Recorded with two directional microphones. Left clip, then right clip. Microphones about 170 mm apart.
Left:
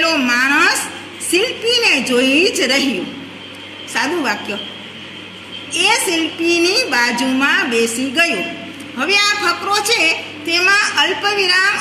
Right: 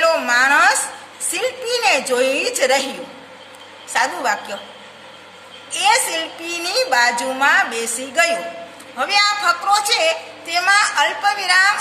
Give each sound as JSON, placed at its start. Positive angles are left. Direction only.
{"t": 0.0, "sound": "a sound", "side_deg": -55}
{"t": 1.3, "sound": "a woman's voice", "side_deg": -55}
{"t": 3.9, "sound": "a woman's voice", "side_deg": -50}
{"t": 6.4, "sound": "a woman's voice", "side_deg": -50}